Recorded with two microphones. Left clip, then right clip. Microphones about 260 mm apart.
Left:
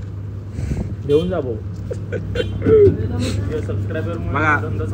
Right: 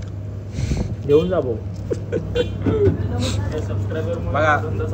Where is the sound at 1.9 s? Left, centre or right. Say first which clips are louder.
Right 2 dB; right.